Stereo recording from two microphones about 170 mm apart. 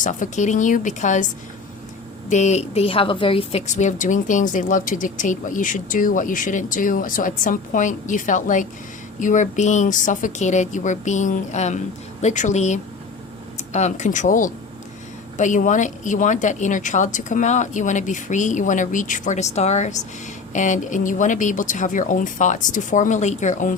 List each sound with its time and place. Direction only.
0.0 s a woman's voice: 45° left (ahead or behind)
2.3 s a woman's voice: 45° left (ahead or behind)